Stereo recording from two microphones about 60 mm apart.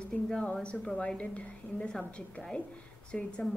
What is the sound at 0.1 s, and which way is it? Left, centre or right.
A woman's voice, centre.